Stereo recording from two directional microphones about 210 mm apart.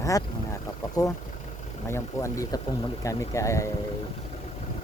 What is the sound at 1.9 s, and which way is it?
Speech, 15° left (ahead or behind).